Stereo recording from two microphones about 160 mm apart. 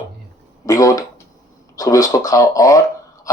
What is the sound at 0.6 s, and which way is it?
Speech, 20° left (ahead or behind).